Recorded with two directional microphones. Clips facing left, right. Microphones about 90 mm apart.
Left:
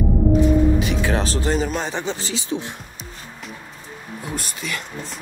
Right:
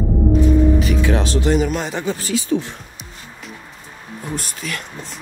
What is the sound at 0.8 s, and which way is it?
Speech, 35° left (ahead or behind).